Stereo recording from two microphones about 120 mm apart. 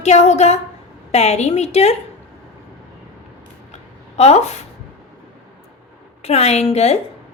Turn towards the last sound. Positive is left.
turn(degrees=60)  # may be behind; listen again after turning